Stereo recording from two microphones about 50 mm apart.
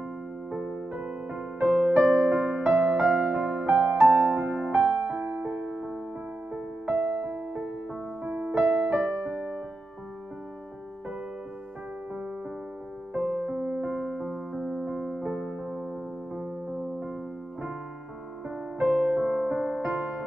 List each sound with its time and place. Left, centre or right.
0.9 s music: right
2.1 s music: right
5.1 s music: centre
6.9 s music: right
8.7 s music: right
9.2 s music: centre
13.1 s music: centre
15.4 s electric piano: centre
16.3 s music: centre
18.8 s music: right
19.8 s music: right